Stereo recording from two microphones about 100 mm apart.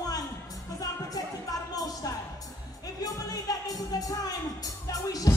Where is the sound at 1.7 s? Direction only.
40° left (ahead or behind).